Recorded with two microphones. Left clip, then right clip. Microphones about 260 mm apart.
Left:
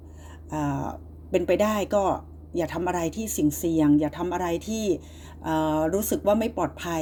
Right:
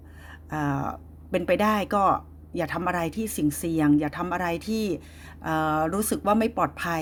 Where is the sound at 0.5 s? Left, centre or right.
Right.